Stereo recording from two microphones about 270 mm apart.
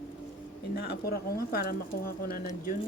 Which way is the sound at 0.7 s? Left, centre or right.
Left.